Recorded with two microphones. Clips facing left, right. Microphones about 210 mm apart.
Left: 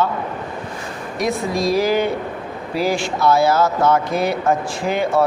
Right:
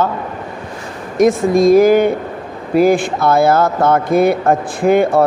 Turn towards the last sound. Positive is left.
turn(degrees=-55)  # may be behind; listen again after turning